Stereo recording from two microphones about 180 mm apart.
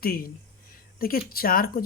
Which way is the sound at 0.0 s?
55° left (ahead or behind).